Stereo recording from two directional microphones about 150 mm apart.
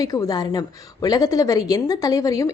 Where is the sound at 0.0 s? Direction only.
25° left (ahead or behind).